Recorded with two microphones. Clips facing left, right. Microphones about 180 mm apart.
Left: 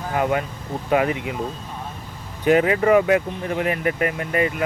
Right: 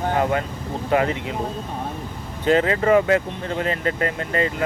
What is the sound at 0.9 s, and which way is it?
Speech, 20° left (ahead or behind).